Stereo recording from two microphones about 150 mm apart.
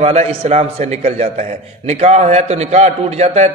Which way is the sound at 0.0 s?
45° right (ahead or behind).